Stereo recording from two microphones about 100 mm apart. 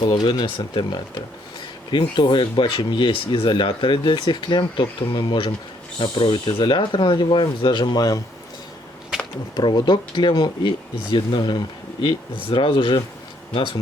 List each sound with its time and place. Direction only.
0.0 s speech: 55° left (ahead or behind); by 8.2 s 40° left (ahead or behind)
9.1 s a sound: 5° right (ahead or behind)
9.6 s speech: 45° left (ahead or behind)